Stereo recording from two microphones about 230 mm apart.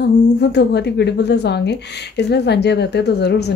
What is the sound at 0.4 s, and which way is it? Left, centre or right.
A woman's voice, left.